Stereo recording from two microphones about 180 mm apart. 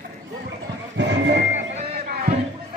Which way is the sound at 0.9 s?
80° right.